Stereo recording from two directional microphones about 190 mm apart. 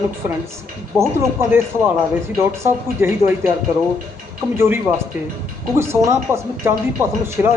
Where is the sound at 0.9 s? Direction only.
15° right (ahead or behind).